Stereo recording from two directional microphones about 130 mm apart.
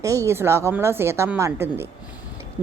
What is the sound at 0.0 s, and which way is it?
Speech, 25° right (ahead or behind).